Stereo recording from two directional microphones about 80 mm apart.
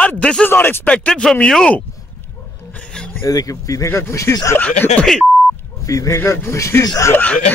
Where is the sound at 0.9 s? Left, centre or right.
Centre.